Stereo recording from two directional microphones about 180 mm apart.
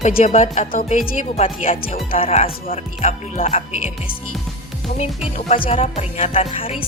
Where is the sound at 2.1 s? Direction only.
35° left (ahead or behind).